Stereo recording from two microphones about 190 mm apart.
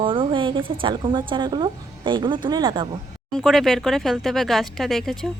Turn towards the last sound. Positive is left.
turn(degrees=0)  # may be behind; listen again after turning